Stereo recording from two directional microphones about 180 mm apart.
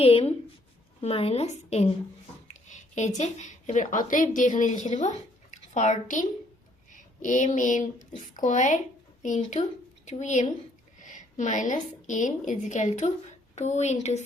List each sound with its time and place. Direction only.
0.0 s a woman's voice: 35° left (ahead or behind)
2.5 s a sound: 40° left (ahead or behind)
3.2 s a woman's voice: 40° left (ahead or behind)